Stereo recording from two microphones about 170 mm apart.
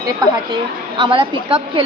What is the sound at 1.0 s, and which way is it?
Speech, 30° right (ahead or behind).